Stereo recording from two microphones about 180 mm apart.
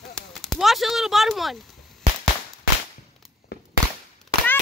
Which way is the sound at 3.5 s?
60° left (ahead or behind).